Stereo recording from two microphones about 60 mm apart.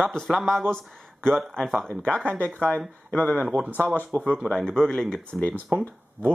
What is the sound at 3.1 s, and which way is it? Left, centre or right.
Speech, left.